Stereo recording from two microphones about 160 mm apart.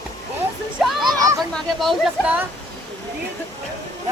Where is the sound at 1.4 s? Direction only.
5° left (ahead or behind).